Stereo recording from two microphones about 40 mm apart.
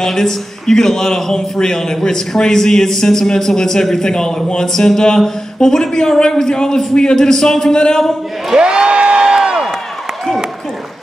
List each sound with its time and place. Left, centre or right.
0.0 s a man's voice: centre
8.5 s crowd: right